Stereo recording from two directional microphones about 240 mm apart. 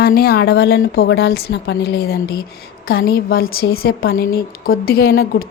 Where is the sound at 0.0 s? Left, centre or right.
Left.